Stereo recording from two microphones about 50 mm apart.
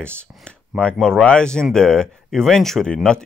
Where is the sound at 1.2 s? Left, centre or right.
Centre.